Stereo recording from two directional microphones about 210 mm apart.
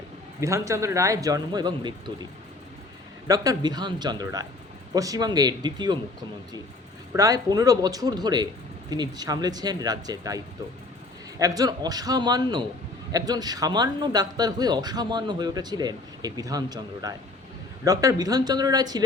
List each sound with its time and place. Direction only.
0.3 s speech: 15° right (ahead or behind)
3.2 s speech: 15° right (ahead or behind)
7.1 s speech: 15° right (ahead or behind)